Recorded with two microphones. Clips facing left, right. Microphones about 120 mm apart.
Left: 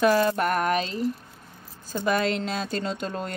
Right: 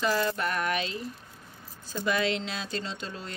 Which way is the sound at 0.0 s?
55° left (ahead or behind).